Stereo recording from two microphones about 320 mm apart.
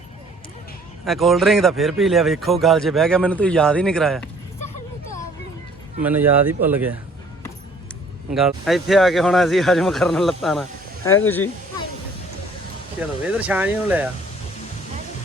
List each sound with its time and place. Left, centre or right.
1.0 s speech: centre
6.0 s speech: centre
8.3 s speech: centre
13.0 s speech: centre